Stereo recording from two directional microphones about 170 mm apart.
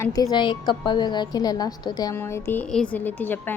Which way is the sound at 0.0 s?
20° left (ahead or behind).